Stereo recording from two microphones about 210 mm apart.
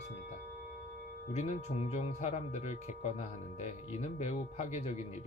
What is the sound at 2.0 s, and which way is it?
Speech, 35° left (ahead or behind).